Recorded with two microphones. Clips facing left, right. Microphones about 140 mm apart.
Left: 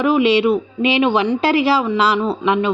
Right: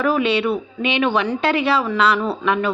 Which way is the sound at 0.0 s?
25° left (ahead or behind).